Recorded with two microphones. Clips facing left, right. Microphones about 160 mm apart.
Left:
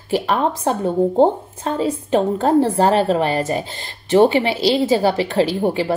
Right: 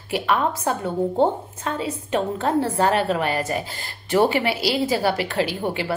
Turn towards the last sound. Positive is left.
turn(degrees=30)  # may be behind; listen again after turning